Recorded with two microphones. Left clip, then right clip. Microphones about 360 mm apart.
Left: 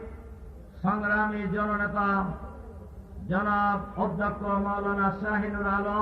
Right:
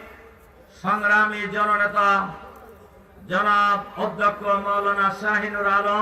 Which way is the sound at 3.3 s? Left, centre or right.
Right.